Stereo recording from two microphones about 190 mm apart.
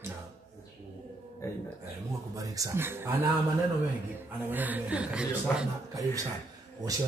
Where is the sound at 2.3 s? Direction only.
20° right (ahead or behind).